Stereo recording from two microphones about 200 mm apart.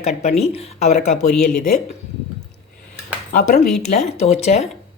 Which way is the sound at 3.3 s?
40° left (ahead or behind).